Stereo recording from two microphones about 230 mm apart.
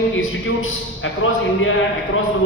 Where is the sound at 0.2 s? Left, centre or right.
Left.